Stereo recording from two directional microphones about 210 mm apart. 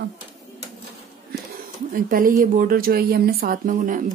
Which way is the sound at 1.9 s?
40° right (ahead or behind).